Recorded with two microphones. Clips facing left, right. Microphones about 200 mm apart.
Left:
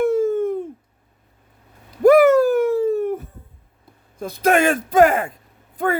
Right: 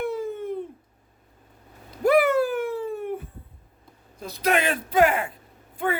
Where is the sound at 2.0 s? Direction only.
45° left (ahead or behind).